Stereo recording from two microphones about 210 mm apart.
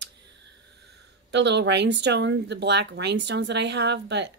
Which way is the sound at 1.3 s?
55° right (ahead or behind).